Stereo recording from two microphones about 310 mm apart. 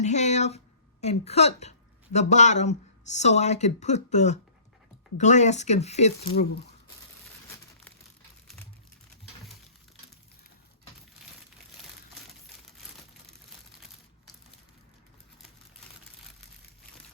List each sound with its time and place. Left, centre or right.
0.0 s speech: left